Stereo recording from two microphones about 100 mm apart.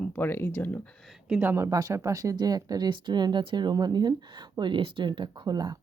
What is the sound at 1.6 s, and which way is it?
Speech, 35° right (ahead or behind).